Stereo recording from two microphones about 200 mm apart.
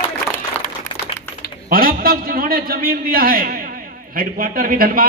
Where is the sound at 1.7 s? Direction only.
45° right (ahead or behind).